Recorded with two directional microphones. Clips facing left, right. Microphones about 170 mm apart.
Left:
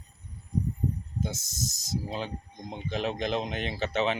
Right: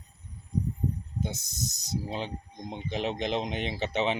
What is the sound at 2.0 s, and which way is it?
Speech, 20° right (ahead or behind).